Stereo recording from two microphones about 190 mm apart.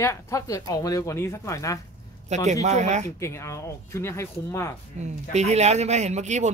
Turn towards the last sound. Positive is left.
turn(degrees=-35)  # may be behind; listen again after turning